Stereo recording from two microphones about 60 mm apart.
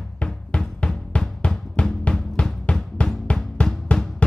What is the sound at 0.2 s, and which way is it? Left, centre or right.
Drum, centre.